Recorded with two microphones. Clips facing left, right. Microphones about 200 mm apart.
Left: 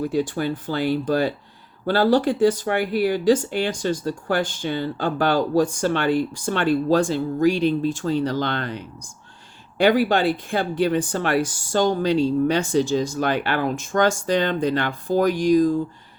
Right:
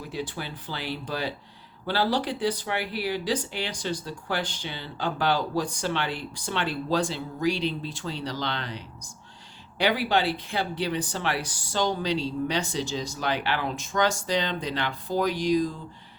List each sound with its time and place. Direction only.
0.0 s speech: 45° left (ahead or behind)